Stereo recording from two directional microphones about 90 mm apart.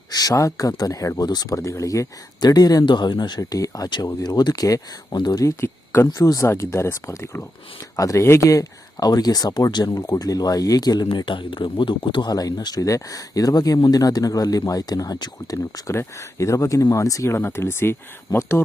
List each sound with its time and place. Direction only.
0.1 s speech: 45° left (ahead or behind)
1.5 s speech: 35° left (ahead or behind)
11.2 s speech: 65° left (ahead or behind); by 18.6 s 30° left (ahead or behind)